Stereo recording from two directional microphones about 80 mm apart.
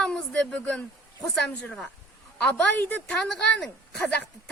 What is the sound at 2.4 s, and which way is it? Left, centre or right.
A woman's voice, centre.